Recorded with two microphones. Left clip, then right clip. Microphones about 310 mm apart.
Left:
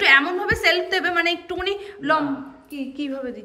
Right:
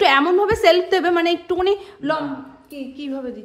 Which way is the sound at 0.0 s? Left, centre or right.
Centre.